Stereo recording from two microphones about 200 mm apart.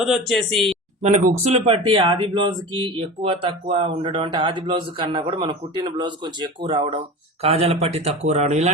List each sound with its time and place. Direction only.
0.0 s speech: centre (ahead or behind)
1.0 s a man's voice: 35° right (ahead or behind)